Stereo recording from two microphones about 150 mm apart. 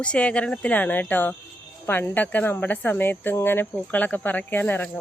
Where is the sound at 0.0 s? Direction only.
10° left (ahead or behind).